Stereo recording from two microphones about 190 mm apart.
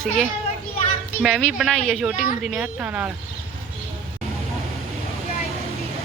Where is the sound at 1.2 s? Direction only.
Centre (ahead or behind).